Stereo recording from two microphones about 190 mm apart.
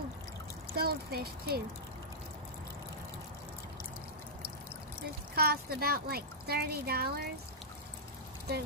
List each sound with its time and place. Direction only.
0.7 s speech: 55° right (ahead or behind)
5.3 s speech: 55° right (ahead or behind)